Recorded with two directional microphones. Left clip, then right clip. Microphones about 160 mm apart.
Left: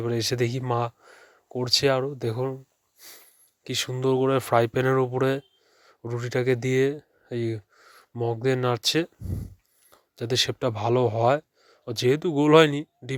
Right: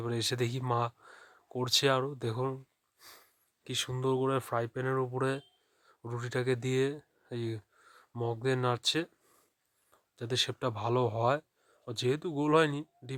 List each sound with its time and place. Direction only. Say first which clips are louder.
0.0 s speech: left 7 dB; 20° left (ahead or behind)
3.0 s sniff: left 6 dB; 15° left (ahead or behind)
3.6 s speech: left 7 dB; 25° left (ahead or behind)
4.5 s speech: left 11 dB; 45° left (ahead or behind)